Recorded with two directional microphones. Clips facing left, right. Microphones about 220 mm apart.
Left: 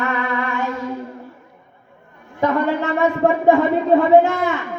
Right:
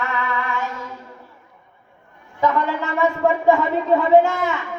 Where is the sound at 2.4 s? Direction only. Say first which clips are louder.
Left 3 dB; 55° left (ahead or behind).